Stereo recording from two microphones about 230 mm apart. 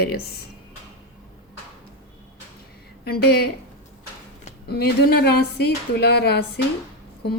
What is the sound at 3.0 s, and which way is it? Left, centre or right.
Speech, left.